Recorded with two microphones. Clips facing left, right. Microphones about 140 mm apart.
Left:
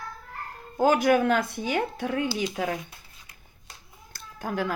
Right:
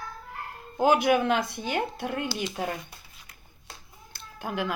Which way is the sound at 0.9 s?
45° left (ahead or behind).